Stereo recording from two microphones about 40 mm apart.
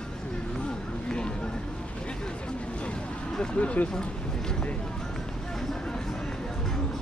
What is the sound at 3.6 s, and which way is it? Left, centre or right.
Speech, left.